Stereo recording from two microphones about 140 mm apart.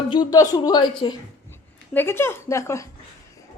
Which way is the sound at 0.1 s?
30° left (ahead or behind).